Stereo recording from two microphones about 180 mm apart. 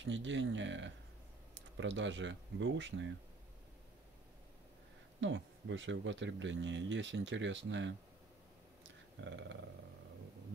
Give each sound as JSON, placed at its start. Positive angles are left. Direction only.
{"t": 0.0, "sound": "speech", "side_deg": -90}
{"t": 5.2, "sound": "speech", "side_deg": -90}
{"t": 9.2, "sound": "speech", "side_deg": -90}